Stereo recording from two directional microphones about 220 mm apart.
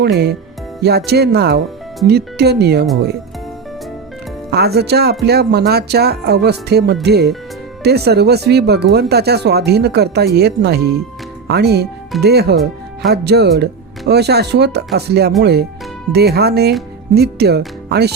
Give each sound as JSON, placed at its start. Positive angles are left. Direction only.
{"t": 0.0, "sound": "speech", "side_deg": -50}
{"t": 4.5, "sound": "speech", "side_deg": -45}